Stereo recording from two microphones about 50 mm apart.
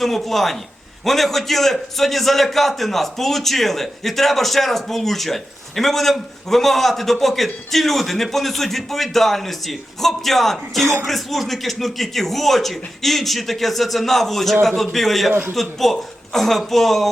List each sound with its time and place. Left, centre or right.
0.0 s a man's voice: centre